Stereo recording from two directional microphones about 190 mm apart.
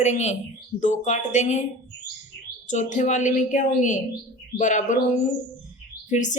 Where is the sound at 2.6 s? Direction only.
40° left (ahead or behind).